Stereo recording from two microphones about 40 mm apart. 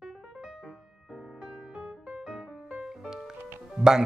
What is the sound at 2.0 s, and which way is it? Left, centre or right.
Music, centre.